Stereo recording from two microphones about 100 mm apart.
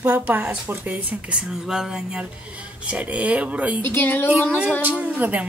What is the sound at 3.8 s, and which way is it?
Speech, 20° left (ahead or behind).